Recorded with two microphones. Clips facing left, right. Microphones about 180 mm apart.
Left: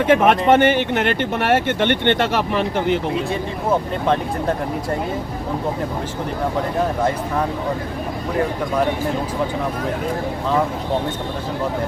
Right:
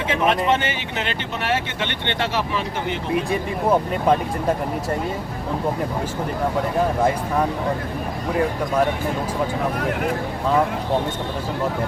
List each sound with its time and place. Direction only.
0.1 s speech: 50° left (ahead or behind)